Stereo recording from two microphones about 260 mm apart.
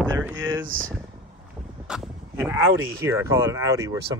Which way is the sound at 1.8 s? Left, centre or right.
Centre.